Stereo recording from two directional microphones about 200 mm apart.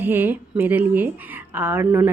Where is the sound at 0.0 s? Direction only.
10° right (ahead or behind).